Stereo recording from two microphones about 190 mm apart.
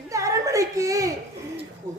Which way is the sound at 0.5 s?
15° right (ahead or behind).